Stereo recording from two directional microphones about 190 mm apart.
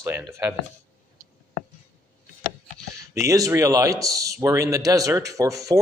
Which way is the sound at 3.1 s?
15° right (ahead or behind).